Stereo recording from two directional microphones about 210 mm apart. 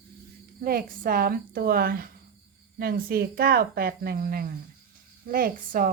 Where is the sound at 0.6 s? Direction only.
45° right (ahead or behind).